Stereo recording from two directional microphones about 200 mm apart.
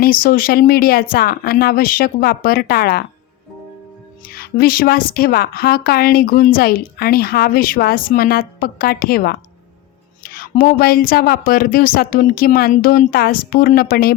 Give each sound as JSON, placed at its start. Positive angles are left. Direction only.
{"t": 0.0, "sound": "a woman's voice", "side_deg": 45}
{"t": 4.4, "sound": "a woman's voice", "side_deg": 50}